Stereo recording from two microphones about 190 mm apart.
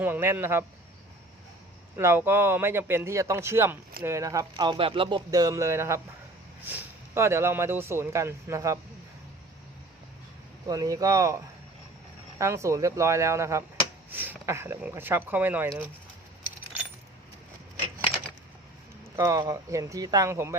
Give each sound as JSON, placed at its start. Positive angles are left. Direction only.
{"t": 0.0, "sound": "speech", "side_deg": -10}
{"t": 2.0, "sound": "speech", "side_deg": -15}
{"t": 10.7, "sound": "speech", "side_deg": -20}
{"t": 12.4, "sound": "speech", "side_deg": -15}
{"t": 19.1, "sound": "speech", "side_deg": -15}